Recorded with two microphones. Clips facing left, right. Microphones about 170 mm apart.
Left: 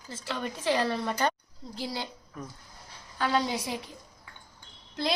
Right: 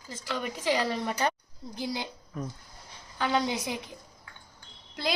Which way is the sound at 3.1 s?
20° right (ahead or behind).